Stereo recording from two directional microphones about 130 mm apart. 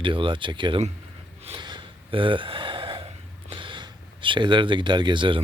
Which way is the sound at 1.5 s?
35° right (ahead or behind).